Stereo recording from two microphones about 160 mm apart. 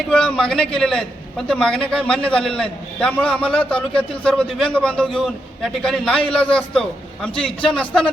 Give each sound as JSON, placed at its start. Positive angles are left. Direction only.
{"t": 0.1, "sound": "a man's voice", "side_deg": 5}